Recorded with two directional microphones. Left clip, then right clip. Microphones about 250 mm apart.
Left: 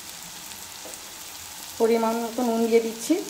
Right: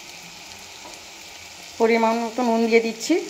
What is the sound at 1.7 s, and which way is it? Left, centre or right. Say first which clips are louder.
Frying: right 3 dB; centre.